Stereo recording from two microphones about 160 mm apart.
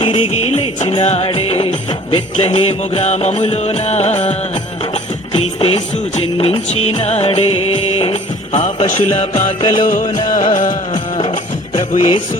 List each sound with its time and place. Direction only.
0.0 s music: 35° left (ahead or behind)
9.8 s music: 55° left (ahead or behind)
11.2 s music: 35° left (ahead or behind)